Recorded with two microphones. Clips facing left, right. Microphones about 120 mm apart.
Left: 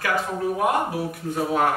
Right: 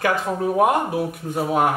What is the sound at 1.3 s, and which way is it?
Speech, 15° right (ahead or behind).